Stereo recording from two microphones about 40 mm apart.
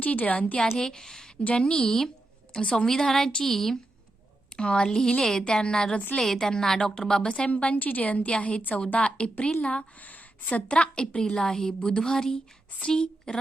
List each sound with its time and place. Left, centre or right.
0.0 s a woman's voice: left
0.8 s a woman's voice: centre
4.5 s a woman's voice: left
6.1 s a woman's voice: centre
7.5 s a woman's voice: left
10.0 s speech: left
10.7 s a woman's voice: left